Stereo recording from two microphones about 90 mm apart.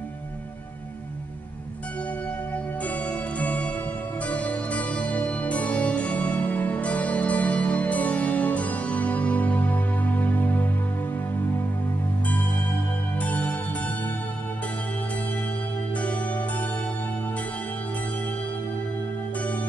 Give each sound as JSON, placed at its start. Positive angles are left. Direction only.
{"t": 2.5, "sound": "music", "side_deg": 15}
{"t": 13.2, "sound": "music", "side_deg": 20}
{"t": 16.0, "sound": "zither", "side_deg": 15}